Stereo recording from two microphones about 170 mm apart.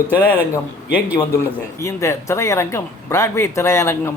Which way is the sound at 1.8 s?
15° left (ahead or behind).